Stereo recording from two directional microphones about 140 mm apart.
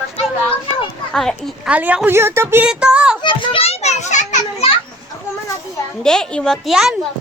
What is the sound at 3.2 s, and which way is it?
Children playing, 35° left (ahead or behind).